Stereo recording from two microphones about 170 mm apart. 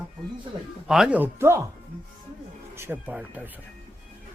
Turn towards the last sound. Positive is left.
turn(degrees=-10)  # may be behind; listen again after turning